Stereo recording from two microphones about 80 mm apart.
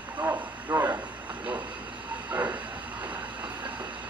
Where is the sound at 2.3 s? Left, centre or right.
Centre.